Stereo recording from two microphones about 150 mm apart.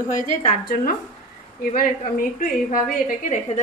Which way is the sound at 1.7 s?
65° left (ahead or behind).